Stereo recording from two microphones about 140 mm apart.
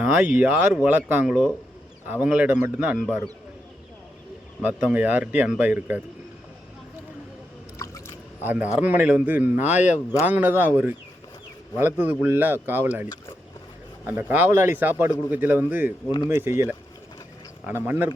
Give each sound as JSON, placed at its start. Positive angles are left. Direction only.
{"t": 0.0, "sound": "speech", "side_deg": -10}
{"t": 4.6, "sound": "speech", "side_deg": -10}
{"t": 7.8, "sound": "a sound", "side_deg": 20}
{"t": 8.4, "sound": "speech", "side_deg": -10}
{"t": 14.1, "sound": "speech", "side_deg": -15}